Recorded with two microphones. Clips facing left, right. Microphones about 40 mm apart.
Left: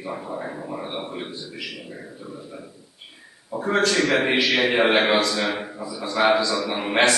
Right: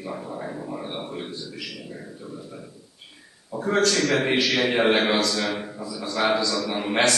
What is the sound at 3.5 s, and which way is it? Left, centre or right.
A man's voice, centre.